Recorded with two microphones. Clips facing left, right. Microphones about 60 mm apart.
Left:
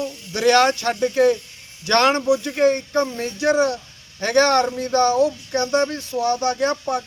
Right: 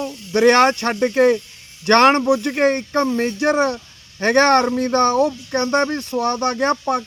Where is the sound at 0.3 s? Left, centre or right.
Right.